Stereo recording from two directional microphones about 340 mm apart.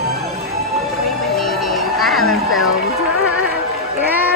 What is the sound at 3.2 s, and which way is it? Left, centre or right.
Music, left.